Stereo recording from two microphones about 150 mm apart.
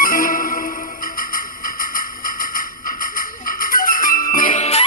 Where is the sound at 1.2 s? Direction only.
70° left (ahead or behind).